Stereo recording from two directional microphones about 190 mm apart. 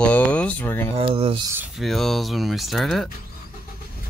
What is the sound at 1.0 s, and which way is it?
Speech, 30° right (ahead or behind).